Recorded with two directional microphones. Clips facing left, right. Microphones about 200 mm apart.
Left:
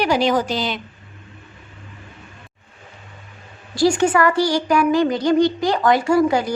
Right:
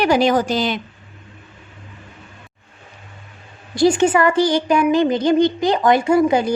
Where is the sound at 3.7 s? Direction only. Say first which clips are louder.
Right 2 dB; 20° right (ahead or behind).